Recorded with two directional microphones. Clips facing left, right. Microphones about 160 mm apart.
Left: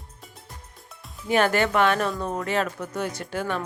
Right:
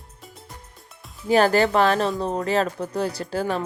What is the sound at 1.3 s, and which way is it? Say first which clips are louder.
Speech: right 4 dB; 35° right (ahead or behind).